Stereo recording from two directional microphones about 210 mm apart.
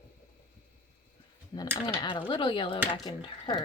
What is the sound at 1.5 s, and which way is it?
Speech, 20° left (ahead or behind).